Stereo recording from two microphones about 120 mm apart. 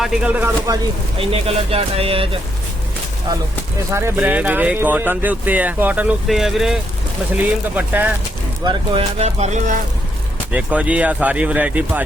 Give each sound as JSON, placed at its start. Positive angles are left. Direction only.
{"t": 0.0, "sound": "speech", "side_deg": -5}
{"t": 1.2, "sound": "speech", "side_deg": -55}
{"t": 3.9, "sound": "speech", "side_deg": -20}
{"t": 6.2, "sound": "speech", "side_deg": 0}
{"t": 7.8, "sound": "speech", "side_deg": -15}
{"t": 8.6, "sound": "speech", "side_deg": -35}
{"t": 9.0, "sound": "speech", "side_deg": -60}
{"t": 10.5, "sound": "speech", "side_deg": -10}